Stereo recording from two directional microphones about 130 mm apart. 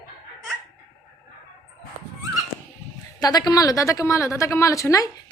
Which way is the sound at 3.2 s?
30° left (ahead or behind).